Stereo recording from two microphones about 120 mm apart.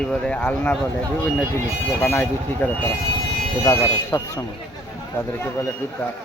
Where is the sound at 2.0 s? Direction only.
20° left (ahead or behind).